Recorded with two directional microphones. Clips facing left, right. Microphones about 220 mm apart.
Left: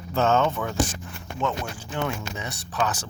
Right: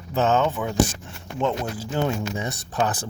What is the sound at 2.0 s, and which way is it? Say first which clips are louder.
Speech: right 4 dB; 35° right (ahead or behind).